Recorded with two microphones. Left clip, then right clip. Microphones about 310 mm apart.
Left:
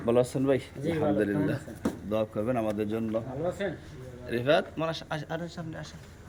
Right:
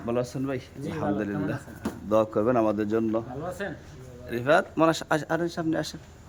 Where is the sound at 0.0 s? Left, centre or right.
Centre.